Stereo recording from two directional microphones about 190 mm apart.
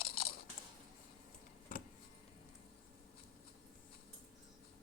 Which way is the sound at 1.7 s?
45° left (ahead or behind).